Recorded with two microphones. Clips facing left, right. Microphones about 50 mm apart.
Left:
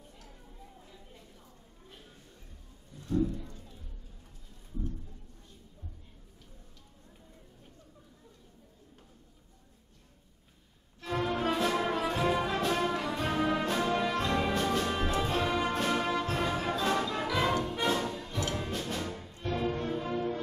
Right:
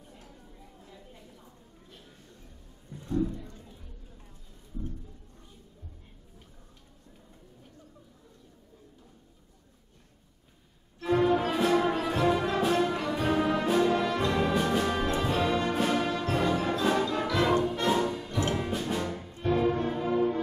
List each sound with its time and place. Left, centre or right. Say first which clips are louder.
0.8 s a sound: right 3 dB; centre
2.9 s music: right 5 dB; right
11.0 s music: right 7 dB; centre
14.5 s music: right 3 dB; centre
15.1 s brass instrument: right 2 dB; centre
15.7 s music: right 2 dB; centre
17.8 s music: right 4 dB; centre